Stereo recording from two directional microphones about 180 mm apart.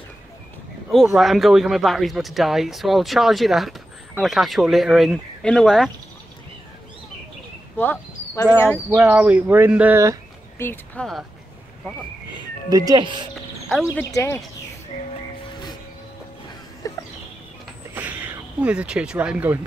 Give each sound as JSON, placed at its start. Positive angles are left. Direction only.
{"t": 1.1, "sound": "speech", "side_deg": 0}
{"t": 7.7, "sound": "a sound", "side_deg": 10}
{"t": 8.9, "sound": "speech", "side_deg": -10}
{"t": 10.6, "sound": "speech", "side_deg": 10}
{"t": 12.6, "sound": "speech", "side_deg": -20}
{"t": 13.9, "sound": "speech", "side_deg": 15}
{"t": 16.8, "sound": "a sound", "side_deg": 20}
{"t": 17.9, "sound": "speech", "side_deg": -10}